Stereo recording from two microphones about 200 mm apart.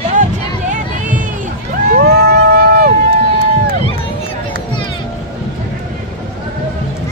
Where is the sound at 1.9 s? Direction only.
55° right (ahead or behind).